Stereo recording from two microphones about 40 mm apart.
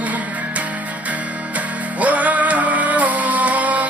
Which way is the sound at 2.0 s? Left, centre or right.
Right.